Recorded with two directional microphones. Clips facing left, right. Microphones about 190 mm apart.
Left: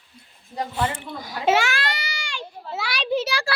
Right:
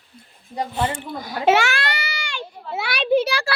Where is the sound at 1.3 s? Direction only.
65° right (ahead or behind).